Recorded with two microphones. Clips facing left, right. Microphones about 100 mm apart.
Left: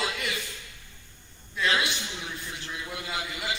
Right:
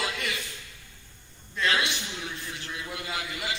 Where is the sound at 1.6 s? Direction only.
5° left (ahead or behind).